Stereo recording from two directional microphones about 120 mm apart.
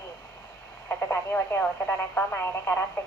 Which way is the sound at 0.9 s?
15° left (ahead or behind).